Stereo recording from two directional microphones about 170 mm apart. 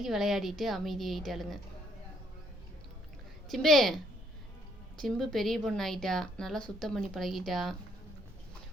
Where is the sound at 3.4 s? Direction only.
Centre (ahead or behind).